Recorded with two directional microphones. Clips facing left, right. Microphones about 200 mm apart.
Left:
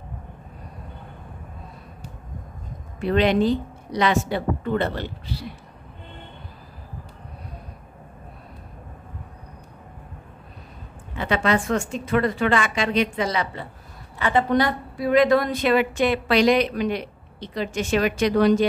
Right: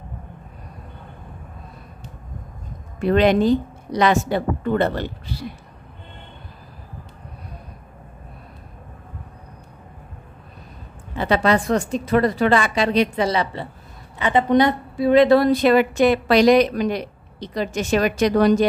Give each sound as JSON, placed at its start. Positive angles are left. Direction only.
{"t": 3.0, "sound": "a woman's voice", "side_deg": -45}
{"t": 11.1, "sound": "a woman's voice", "side_deg": -35}
{"t": 14.1, "sound": "a woman's voice", "side_deg": -20}